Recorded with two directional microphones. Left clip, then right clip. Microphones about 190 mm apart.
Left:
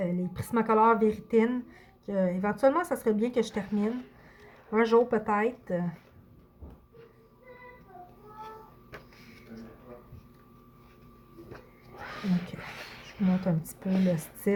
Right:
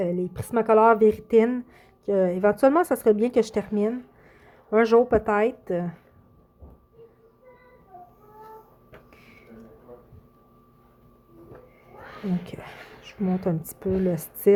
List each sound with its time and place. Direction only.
0.0 s a woman's voice: 45° right (ahead or behind)
13.1 s a woman's voice: 45° right (ahead or behind)